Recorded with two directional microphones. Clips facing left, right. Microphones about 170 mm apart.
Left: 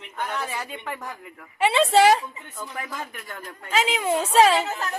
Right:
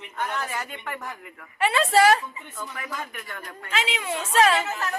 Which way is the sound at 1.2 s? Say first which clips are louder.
Left 3 dB; 20° left (ahead or behind).